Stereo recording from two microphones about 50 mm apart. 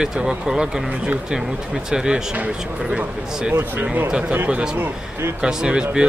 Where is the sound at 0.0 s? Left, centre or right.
Centre.